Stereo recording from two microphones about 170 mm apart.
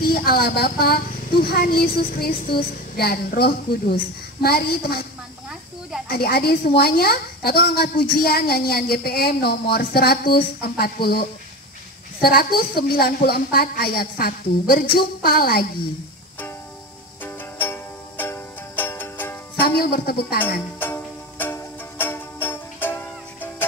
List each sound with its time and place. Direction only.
0.0 s a woman's voice: 65° left (ahead or behind)
5.5 s snake: centre (ahead or behind)
6.0 s a woman's voice: 65° left (ahead or behind)
17.2 s music: 10° left (ahead or behind)
19.6 s speech: 65° left (ahead or behind)
20.8 s music: 10° left (ahead or behind)